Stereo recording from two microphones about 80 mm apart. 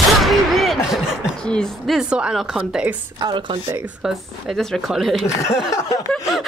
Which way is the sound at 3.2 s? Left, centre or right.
Right.